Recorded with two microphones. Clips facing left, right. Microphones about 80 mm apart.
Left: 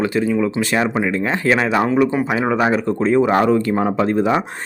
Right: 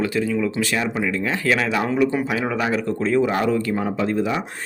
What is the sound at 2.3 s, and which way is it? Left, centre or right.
Speech, left.